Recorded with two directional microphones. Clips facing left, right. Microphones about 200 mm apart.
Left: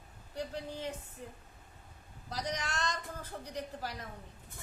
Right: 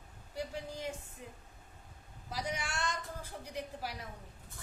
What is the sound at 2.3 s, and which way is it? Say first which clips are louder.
Speech: left 1 dB; 10° right (ahead or behind).